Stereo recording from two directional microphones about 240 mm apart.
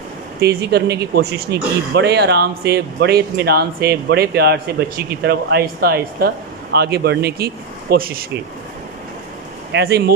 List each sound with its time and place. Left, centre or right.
0.4 s speech: right
9.7 s speech: right